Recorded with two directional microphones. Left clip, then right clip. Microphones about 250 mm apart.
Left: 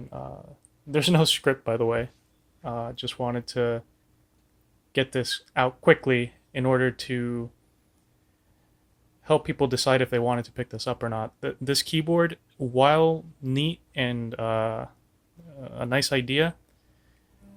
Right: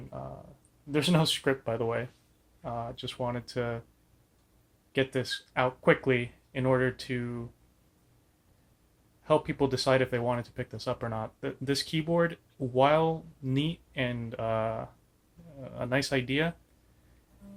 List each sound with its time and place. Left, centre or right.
0.1 s a sound: left
0.9 s speech: left
4.9 s speech: left
9.2 s speech: left